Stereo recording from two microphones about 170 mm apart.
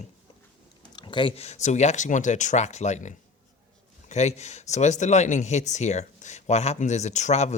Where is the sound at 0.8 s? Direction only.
25° left (ahead or behind).